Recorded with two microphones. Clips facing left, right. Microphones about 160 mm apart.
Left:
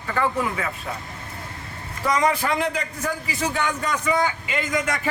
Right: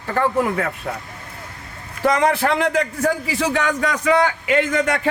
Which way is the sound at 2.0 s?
70° right (ahead or behind).